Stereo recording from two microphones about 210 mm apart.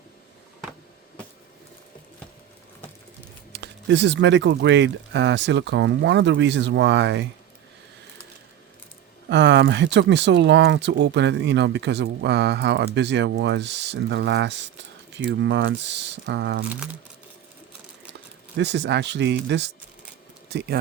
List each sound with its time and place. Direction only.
3.5 s speech: 55° right (ahead or behind)
9.3 s speech: 55° right (ahead or behind)
18.5 s speech: 55° right (ahead or behind)